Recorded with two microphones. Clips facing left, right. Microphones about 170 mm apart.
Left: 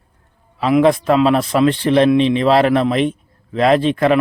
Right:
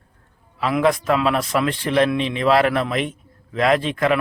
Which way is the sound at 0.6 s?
25° left (ahead or behind).